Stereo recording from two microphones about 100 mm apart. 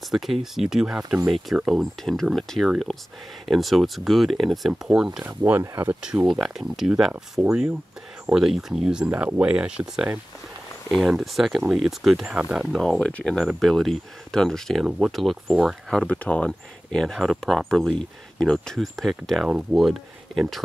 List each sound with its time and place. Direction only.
0.1 s speech: centre (ahead or behind)
5.2 s speech: 25° right (ahead or behind)
6.3 s speech: 5° right (ahead or behind)
12.7 s speech: 5° left (ahead or behind)
15.9 s speech: 10° left (ahead or behind)